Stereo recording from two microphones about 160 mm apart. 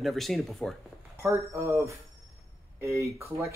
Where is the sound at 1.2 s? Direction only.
20° right (ahead or behind).